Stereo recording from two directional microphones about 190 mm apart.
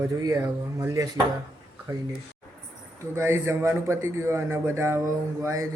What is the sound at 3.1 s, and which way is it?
A man's voice, 15° right (ahead or behind).